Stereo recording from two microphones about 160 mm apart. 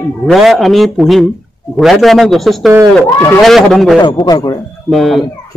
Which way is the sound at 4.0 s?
30° left (ahead or behind).